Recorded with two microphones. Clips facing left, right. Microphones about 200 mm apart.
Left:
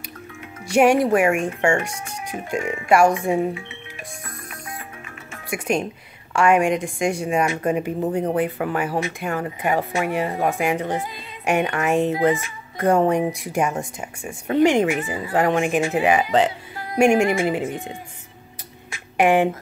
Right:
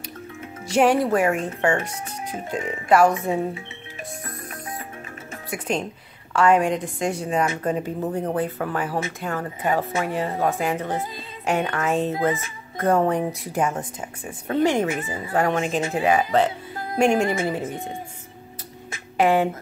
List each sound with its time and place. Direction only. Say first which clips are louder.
0.7 s speech: left 2 dB; 15° left (ahead or behind)
5.5 s speech: left 3 dB; 10° left (ahead or behind)
16.9 s speech: left 3 dB; 10° left (ahead or behind)
19.1 s speech: left 2 dB; 15° left (ahead or behind)